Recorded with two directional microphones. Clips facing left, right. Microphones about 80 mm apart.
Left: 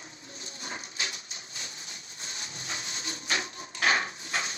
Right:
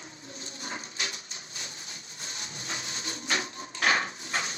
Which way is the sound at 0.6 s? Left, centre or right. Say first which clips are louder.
Even; right.